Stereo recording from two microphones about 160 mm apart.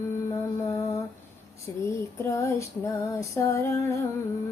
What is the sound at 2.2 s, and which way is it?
Female singing, 20° left (ahead or behind).